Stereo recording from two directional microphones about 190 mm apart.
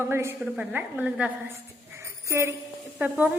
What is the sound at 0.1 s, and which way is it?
A woman's voice, 15° right (ahead or behind).